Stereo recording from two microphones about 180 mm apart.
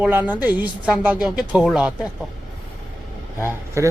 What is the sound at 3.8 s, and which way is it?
Speech, 15° right (ahead or behind).